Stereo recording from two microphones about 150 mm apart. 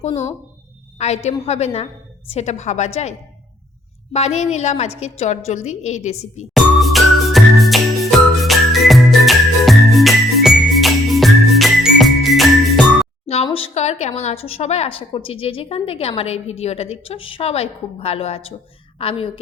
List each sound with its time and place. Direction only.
0.9 s a woman's voice: 45° left (ahead or behind)
6.5 s music: centre (ahead or behind)
13.2 s a woman's voice: 40° left (ahead or behind)